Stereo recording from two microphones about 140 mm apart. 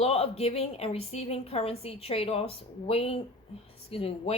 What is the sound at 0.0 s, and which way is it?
Speech, 45° left (ahead or behind).